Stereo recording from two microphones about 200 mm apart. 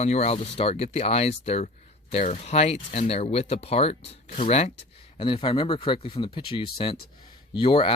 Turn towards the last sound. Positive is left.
turn(degrees=25)  # may be behind; listen again after turning